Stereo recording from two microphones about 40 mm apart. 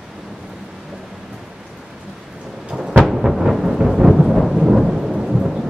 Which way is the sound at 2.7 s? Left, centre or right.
Centre.